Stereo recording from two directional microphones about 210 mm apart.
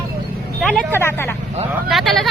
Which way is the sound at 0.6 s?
5° left (ahead or behind).